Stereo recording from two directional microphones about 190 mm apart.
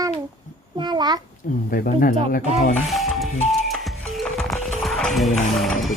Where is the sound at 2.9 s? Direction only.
Centre (ahead or behind).